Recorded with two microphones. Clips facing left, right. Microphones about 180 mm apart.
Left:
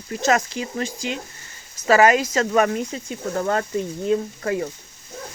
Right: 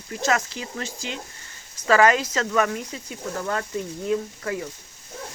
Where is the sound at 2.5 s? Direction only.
30° left (ahead or behind).